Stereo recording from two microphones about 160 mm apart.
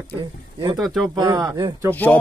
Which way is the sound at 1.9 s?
10° left (ahead or behind).